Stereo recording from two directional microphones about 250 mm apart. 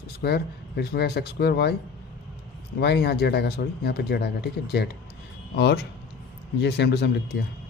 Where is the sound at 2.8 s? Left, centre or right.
Left.